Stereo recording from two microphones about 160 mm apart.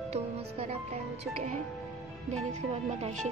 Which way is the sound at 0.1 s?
40° right (ahead or behind).